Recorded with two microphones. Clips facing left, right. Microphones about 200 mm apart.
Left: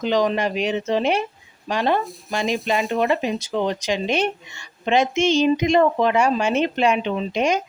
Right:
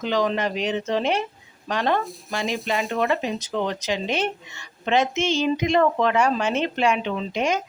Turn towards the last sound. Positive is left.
turn(degrees=15)  # may be behind; listen again after turning